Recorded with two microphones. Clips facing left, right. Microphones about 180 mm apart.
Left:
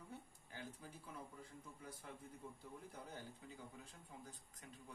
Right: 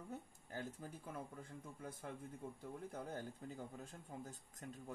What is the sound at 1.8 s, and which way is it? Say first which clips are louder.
Speech: right 6 dB; 50° right (ahead or behind).